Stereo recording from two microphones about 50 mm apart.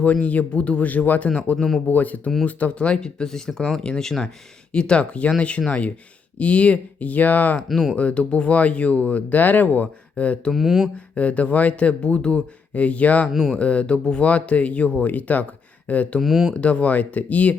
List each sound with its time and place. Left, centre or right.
0.0 s speech: left
1.5 s speech: centre
1.9 s speech: left
10.5 s speech: centre
10.9 s speech: left
16.2 s speech: centre
16.6 s speech: left